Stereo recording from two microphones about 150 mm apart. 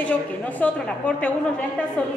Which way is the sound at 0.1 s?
10° left (ahead or behind).